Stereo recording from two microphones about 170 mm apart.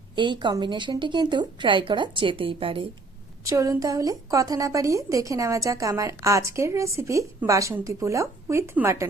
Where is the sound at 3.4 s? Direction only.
20° right (ahead or behind).